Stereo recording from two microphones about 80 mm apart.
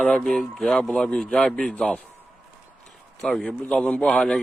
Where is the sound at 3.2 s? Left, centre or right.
Centre.